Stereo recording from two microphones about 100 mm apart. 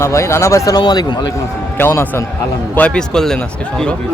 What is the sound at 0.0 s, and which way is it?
Speech, 30° left (ahead or behind).